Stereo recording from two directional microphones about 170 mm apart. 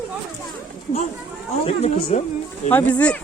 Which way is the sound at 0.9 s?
35° left (ahead or behind).